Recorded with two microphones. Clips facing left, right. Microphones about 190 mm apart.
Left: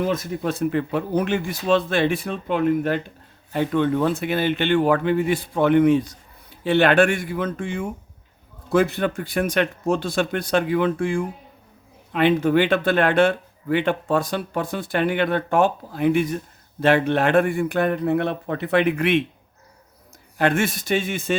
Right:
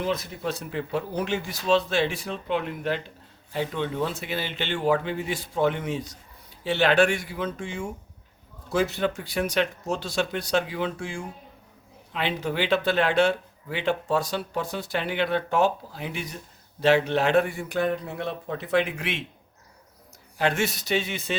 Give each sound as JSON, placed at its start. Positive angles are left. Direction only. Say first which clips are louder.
{"t": 0.0, "sound": "speech", "louder": "left 5 dB", "side_deg": 50}
{"t": 20.4, "sound": "a man's voice", "louder": "left 4 dB", "side_deg": 55}